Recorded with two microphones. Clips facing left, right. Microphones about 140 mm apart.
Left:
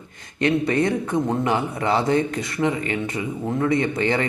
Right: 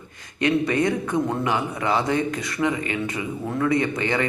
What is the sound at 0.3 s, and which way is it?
Speech, 35° left (ahead or behind).